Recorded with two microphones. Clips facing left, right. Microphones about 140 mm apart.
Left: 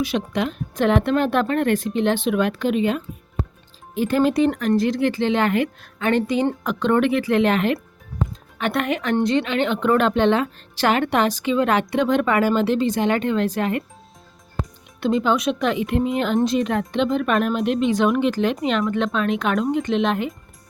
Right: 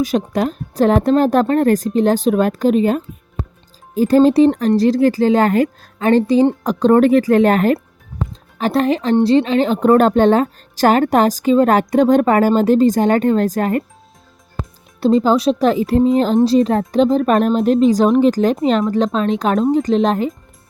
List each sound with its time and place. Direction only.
0.0 s speech: 40° right (ahead or behind)
15.0 s speech: 35° right (ahead or behind)